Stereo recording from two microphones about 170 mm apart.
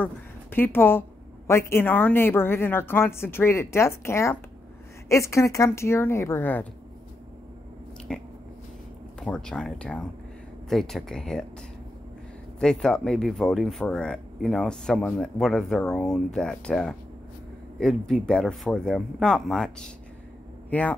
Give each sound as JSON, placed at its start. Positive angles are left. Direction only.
{"t": 0.0, "sound": "a woman's voice", "side_deg": 10}
{"t": 8.1, "sound": "speech", "side_deg": 5}
{"t": 12.5, "sound": "a woman's voice", "side_deg": 5}